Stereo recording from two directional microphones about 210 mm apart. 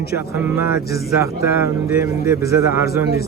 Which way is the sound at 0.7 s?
45° left (ahead or behind).